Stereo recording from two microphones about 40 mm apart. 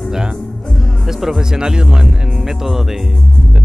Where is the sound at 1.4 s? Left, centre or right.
Centre.